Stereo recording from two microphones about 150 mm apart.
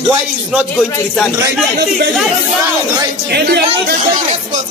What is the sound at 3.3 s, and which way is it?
Speech, 90° right.